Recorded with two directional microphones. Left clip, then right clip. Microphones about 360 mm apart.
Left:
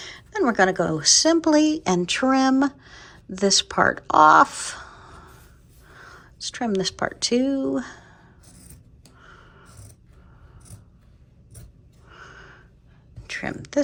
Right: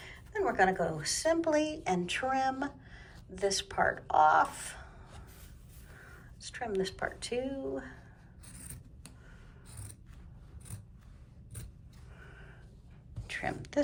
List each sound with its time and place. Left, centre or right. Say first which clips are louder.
0.0 s a woman's voice: left 9 dB; centre
6.7 s speech: left 7 dB; centre
13.2 s a woman's voice: left 6 dB; centre